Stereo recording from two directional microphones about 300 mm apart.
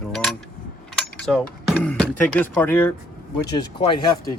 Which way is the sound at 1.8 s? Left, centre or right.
Centre.